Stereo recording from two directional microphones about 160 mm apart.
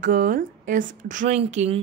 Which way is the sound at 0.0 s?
60° right (ahead or behind).